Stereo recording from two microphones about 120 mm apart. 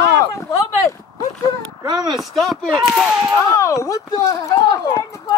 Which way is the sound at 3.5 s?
25° left (ahead or behind).